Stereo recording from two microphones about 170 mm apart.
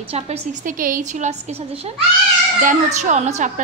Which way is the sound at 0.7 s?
55° right (ahead or behind).